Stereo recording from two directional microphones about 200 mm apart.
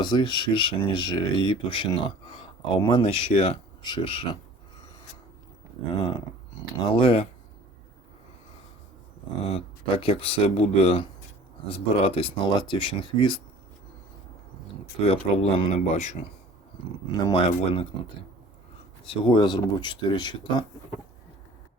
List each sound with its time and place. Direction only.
0.0 s speech: 20° left (ahead or behind)
6.7 s speech: 25° left (ahead or behind)
9.4 s speech: 30° left (ahead or behind)
15.0 s speech: 30° left (ahead or behind)
17.2 s speech: 25° left (ahead or behind)
19.0 s speech: 25° left (ahead or behind)